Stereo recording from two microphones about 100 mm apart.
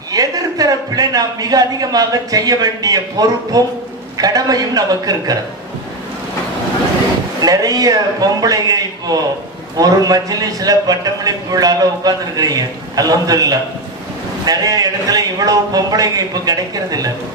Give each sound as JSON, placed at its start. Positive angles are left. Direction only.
{"t": 0.1, "sound": "a man's voice", "side_deg": -40}
{"t": 7.4, "sound": "a man's voice", "side_deg": -40}